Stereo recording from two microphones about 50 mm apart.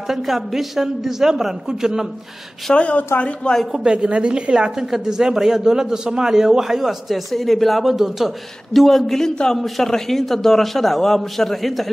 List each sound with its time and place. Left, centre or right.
0.1 s a woman's voice: centre
2.7 s speech: left
3.8 s a woman's voice: centre